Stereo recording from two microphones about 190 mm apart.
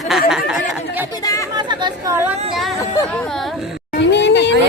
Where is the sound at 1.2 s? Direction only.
20° left (ahead or behind).